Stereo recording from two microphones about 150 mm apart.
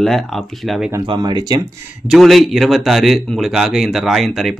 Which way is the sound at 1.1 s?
30° right (ahead or behind).